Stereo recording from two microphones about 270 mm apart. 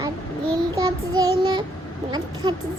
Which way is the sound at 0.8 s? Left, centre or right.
Centre.